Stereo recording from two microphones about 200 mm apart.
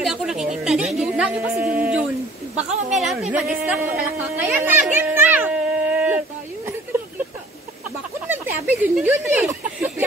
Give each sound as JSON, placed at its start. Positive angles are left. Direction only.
{"t": 0.0, "sound": "a sound", "side_deg": 0}
{"t": 2.5, "sound": "a woman's voice", "side_deg": 0}
{"t": 8.3, "sound": "speech", "side_deg": -10}